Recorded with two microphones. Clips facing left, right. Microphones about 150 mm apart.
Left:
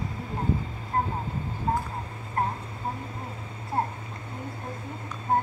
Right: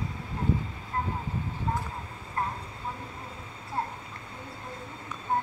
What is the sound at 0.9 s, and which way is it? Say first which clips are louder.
Vehicle: left 5 dB; 50° left (ahead or behind).